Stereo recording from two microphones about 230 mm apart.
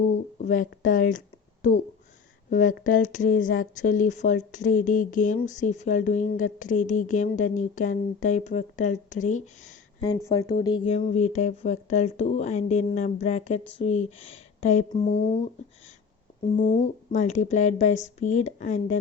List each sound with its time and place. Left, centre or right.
0.3 s speech: left
10.0 s speech: centre
16.4 s speech: left